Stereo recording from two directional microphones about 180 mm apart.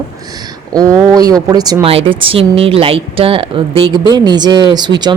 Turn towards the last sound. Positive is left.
turn(degrees=-25)  # may be behind; listen again after turning